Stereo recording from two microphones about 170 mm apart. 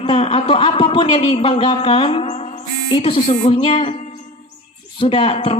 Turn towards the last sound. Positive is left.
turn(degrees=30)  # may be behind; listen again after turning